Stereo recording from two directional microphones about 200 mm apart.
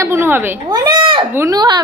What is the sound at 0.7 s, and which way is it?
Speech, 20° right (ahead or behind).